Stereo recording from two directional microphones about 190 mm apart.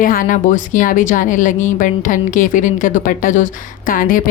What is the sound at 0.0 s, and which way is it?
Speech, 45° left (ahead or behind).